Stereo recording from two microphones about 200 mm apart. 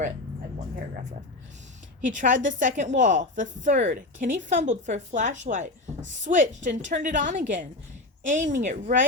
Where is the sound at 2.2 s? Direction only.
40° right (ahead or behind).